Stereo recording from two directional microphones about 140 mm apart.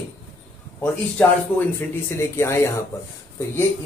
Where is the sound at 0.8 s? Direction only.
10° left (ahead or behind).